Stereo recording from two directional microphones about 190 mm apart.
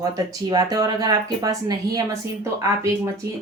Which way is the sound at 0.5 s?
20° right (ahead or behind).